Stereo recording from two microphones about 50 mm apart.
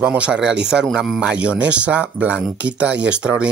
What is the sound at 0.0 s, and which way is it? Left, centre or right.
Speech, right.